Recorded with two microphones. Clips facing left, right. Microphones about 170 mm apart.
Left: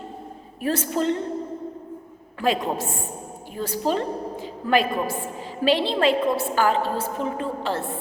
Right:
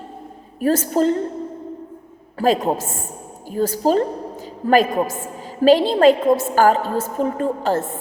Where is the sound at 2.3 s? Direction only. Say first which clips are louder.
Right 5 dB; 40° right (ahead or behind).